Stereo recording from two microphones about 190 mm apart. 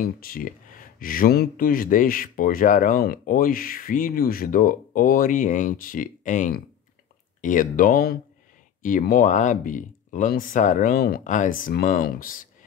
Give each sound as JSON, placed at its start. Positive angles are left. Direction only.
{"t": 0.0, "sound": "speech", "side_deg": 50}